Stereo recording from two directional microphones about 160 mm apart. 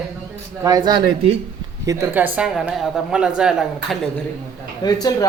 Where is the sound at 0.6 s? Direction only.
20° right (ahead or behind); by 4.0 s 5° right (ahead or behind).